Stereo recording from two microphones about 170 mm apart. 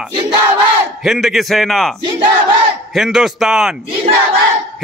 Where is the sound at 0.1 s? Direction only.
25° right (ahead or behind).